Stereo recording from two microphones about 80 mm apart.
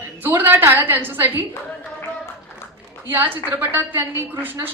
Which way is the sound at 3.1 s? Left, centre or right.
Right.